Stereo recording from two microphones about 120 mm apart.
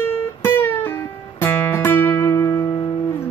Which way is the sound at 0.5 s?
15° left (ahead or behind).